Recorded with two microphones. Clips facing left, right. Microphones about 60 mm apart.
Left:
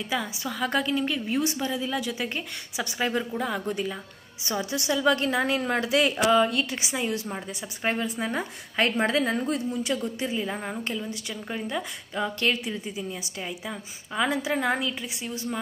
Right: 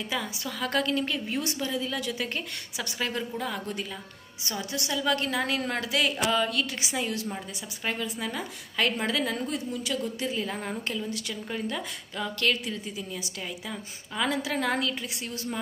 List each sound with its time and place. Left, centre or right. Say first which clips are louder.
0.1 s a woman's voice: left 5 dB; centre; by 10.3 s left
10.3 s a woman's voice: left 2 dB; centre